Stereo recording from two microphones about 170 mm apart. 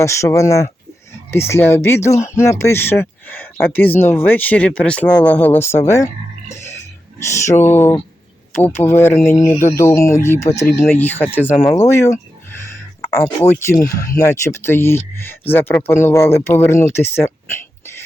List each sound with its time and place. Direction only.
0.0 s speech: 15° left (ahead or behind)
7.4 s speech: 15° left (ahead or behind)
13.1 s speech: 15° left (ahead or behind)